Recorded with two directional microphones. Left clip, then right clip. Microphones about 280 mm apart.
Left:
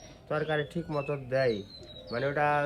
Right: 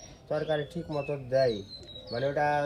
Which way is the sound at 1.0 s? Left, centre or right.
Left.